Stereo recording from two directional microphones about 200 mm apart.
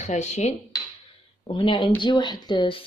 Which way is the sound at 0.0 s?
35° left (ahead or behind).